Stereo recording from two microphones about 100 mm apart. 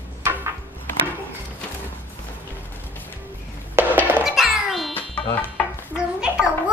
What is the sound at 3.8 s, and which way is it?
Music, 25° right (ahead or behind).